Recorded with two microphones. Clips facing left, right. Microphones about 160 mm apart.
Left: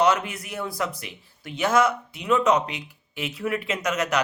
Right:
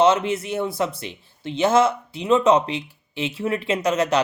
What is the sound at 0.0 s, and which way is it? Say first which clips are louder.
Speech: right 4 dB; 25° right (ahead or behind).